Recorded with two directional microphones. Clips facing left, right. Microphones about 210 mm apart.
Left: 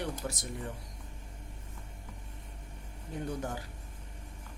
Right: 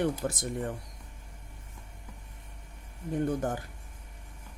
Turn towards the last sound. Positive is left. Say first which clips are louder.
# right 6 dB
turn(degrees=-50)  # may be behind; listen again after turning